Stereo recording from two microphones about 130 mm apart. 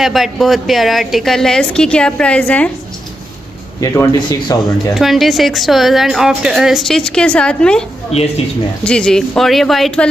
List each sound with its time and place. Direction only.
0.0 s a woman's voice: centre (ahead or behind)
3.8 s a man's voice: 25° left (ahead or behind)
4.9 s a woman's voice: centre (ahead or behind)
8.1 s speech: 55° left (ahead or behind)
8.8 s a woman's voice: 5° left (ahead or behind)